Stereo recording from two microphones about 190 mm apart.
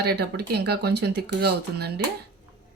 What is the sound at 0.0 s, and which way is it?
Speech, 60° right (ahead or behind).